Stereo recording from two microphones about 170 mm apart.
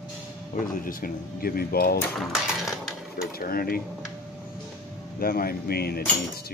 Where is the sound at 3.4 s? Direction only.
60° left (ahead or behind).